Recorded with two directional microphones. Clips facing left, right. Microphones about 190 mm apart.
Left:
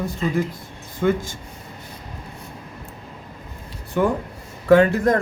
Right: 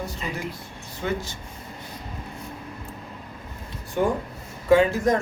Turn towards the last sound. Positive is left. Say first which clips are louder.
# left 3 dB
turn(degrees=60)  # may be behind; listen again after turning